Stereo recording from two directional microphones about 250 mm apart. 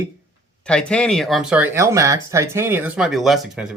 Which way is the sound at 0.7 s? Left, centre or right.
Centre.